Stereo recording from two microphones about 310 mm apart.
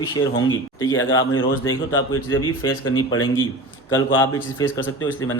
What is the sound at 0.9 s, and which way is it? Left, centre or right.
Speech, left.